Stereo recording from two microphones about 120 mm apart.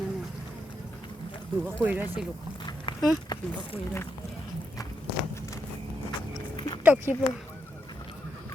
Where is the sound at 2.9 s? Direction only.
50° left (ahead or behind).